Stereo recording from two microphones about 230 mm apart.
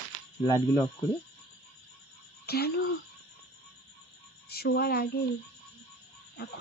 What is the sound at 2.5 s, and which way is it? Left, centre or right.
Speech, left.